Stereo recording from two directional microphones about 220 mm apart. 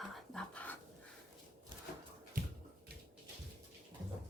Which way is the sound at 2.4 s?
40° right (ahead or behind).